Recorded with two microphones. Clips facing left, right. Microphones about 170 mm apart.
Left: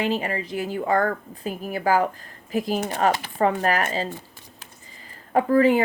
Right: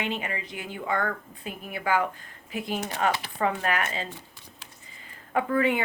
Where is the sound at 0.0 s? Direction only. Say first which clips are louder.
Left 7 dB; 35° left (ahead or behind).